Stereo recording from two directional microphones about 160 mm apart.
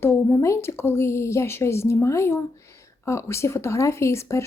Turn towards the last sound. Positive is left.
turn(degrees=15)  # may be behind; listen again after turning